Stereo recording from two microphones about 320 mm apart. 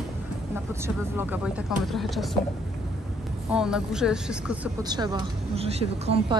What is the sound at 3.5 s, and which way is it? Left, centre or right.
Speech, centre.